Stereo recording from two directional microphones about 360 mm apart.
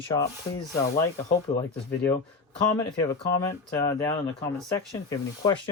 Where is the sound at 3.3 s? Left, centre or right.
Centre.